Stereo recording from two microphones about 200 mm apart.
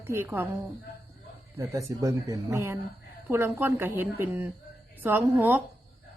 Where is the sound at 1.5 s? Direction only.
15° right (ahead or behind).